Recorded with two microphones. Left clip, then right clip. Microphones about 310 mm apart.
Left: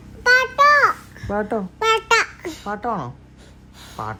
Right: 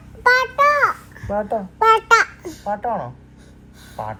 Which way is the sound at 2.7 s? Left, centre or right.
Left.